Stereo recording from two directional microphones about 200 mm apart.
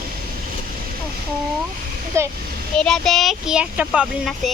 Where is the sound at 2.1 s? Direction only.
15° right (ahead or behind).